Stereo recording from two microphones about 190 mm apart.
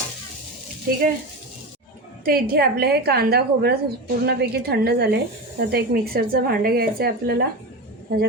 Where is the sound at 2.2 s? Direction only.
50° right (ahead or behind).